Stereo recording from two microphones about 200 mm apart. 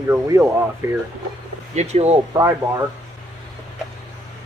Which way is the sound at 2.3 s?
15° right (ahead or behind).